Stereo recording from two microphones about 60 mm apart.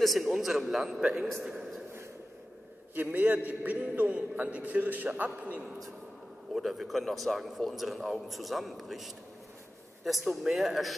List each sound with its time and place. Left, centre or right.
0.0 s a man's voice: centre
2.9 s a man's voice: right
6.5 s a man's voice: centre